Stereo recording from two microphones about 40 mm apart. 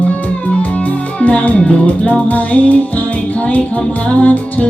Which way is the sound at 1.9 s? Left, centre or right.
Left.